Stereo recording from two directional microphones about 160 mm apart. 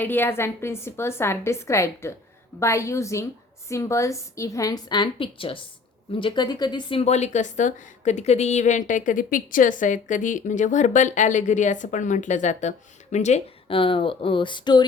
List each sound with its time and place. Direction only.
0.0 s a woman's voice: 10° left (ahead or behind); by 7.0 s 30° left (ahead or behind)
7.0 s a woman's voice: 45° left (ahead or behind); by 14.8 s 25° left (ahead or behind)